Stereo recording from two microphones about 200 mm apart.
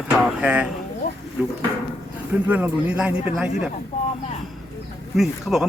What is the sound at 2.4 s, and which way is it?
Speech, 5° right (ahead or behind).